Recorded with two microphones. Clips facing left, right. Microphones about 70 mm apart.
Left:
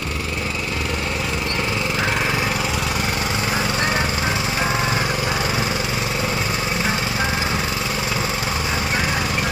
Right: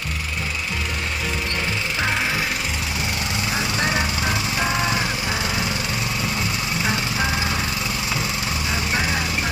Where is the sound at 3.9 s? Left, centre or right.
Left.